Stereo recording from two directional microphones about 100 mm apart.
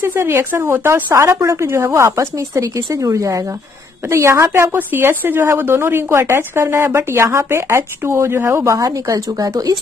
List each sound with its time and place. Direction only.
0.0 s a woman's voice: 25° right (ahead or behind)
1.1 s a woman's voice: 30° right (ahead or behind)